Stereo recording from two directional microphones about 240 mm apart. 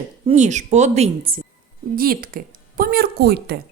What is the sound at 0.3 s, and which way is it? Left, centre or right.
A woman's voice, right.